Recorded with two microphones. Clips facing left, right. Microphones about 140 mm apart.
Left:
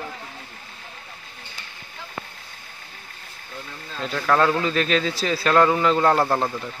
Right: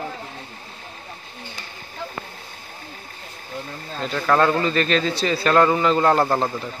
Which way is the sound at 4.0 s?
Centre (ahead or behind).